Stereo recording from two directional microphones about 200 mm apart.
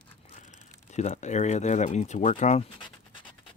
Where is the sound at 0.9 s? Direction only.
35° left (ahead or behind).